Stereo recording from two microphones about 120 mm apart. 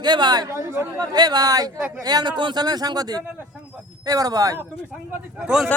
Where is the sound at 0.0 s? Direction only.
35° right (ahead or behind).